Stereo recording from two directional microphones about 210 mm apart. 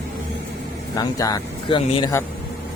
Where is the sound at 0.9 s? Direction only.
15° left (ahead or behind).